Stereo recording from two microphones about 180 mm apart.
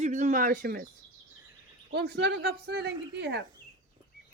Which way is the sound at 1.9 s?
65° right (ahead or behind).